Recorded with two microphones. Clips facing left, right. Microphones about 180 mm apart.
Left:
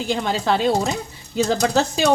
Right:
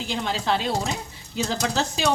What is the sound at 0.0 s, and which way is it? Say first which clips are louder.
Speech: left 5 dB; 50° left (ahead or behind).